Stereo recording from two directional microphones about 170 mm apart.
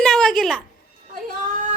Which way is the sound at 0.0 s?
5° left (ahead or behind).